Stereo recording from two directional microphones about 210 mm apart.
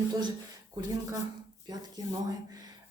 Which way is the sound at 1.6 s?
20° right (ahead or behind).